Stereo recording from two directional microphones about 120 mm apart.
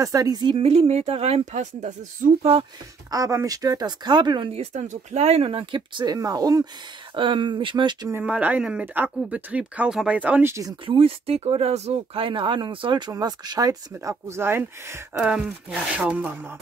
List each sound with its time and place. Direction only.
0.0 s speech: 30° right (ahead or behind)
0.7 s speech: 60° right (ahead or behind); by 2.5 s 80° right
3.1 s speech: 25° right (ahead or behind)
4.5 s speech: 70° right (ahead or behind); by 5.8 s 50° right (ahead or behind)
5.8 s speech: 35° right (ahead or behind)
7.2 s speech: 45° right (ahead or behind)
8.2 s speech: 10° right (ahead or behind)
10.9 s speech: 50° right (ahead or behind); by 15.0 s 20° right (ahead or behind)
15.1 s speech: 10° right (ahead or behind)